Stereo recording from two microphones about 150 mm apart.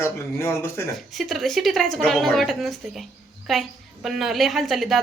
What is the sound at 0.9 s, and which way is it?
A woman's voice, centre (ahead or behind).